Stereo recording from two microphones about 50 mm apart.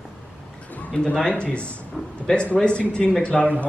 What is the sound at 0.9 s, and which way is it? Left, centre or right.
Speech, centre.